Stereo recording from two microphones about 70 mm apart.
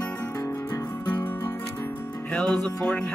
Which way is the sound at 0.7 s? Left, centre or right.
Left.